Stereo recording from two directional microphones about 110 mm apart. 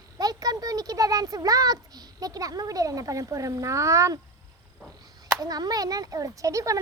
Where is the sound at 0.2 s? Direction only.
35° right (ahead or behind).